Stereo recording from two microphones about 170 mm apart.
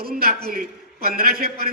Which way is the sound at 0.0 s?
65° right (ahead or behind).